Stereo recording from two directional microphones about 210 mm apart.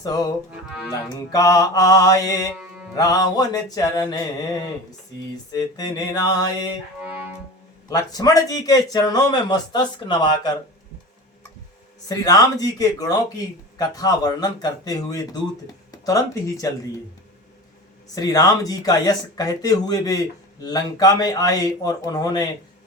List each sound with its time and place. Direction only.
0.0 s a man's voice: 15° left (ahead or behind)
5.5 s a man's voice: 20° left (ahead or behind)
7.9 s a man's voice: 15° left (ahead or behind)
12.0 s a man's voice: 15° left (ahead or behind)
18.1 s a man's voice: 15° left (ahead or behind)